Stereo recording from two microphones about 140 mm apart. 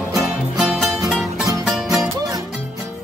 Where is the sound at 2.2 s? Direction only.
25° right (ahead or behind).